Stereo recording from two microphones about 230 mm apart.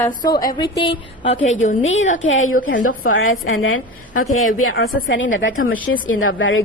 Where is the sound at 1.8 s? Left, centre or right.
Left.